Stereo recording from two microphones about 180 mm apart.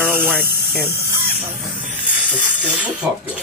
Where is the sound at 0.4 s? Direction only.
60° left (ahead or behind).